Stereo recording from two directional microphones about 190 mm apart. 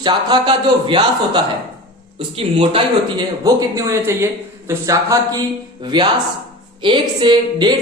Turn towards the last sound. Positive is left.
turn(degrees=-25)  # may be behind; listen again after turning